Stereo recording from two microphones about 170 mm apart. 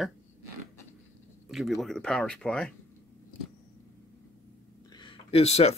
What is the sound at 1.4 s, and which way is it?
Speech, centre (ahead or behind).